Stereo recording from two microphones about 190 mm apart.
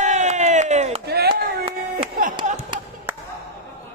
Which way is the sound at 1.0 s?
55° right (ahead or behind).